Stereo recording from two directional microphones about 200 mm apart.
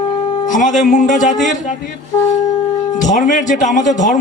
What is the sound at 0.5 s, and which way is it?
Speech, 40° left (ahead or behind).